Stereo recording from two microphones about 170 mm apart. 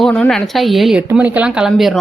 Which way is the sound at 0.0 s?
5° left (ahead or behind).